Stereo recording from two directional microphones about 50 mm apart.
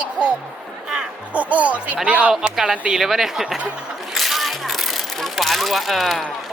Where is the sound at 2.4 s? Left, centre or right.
Centre.